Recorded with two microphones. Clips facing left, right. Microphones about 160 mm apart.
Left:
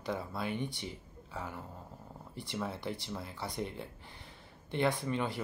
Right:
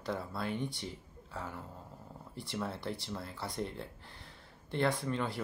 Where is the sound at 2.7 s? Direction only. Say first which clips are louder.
Even; 20° left (ahead or behind).